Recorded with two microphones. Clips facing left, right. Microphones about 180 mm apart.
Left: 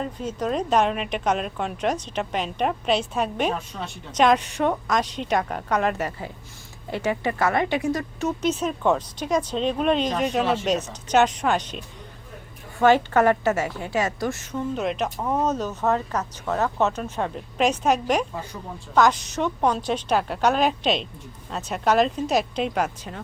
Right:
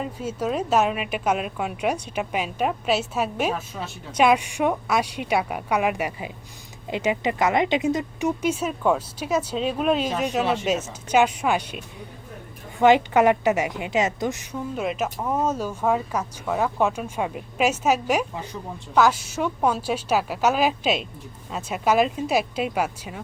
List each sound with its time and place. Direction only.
0.0 s a woman's voice: 5° right (ahead or behind)
12.8 s a woman's voice: 15° right (ahead or behind)
14.5 s a woman's voice: 5° right (ahead or behind)